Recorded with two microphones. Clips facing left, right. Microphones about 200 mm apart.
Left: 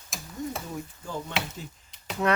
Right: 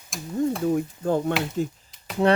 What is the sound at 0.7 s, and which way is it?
Speech, 55° right (ahead or behind).